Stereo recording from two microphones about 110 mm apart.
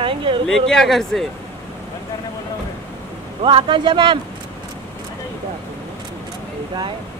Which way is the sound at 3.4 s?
50° right (ahead or behind).